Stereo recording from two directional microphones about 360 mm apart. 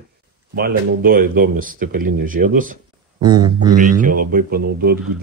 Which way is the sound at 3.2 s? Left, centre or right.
Centre.